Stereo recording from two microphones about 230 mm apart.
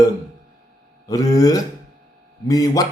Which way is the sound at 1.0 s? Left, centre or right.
Centre.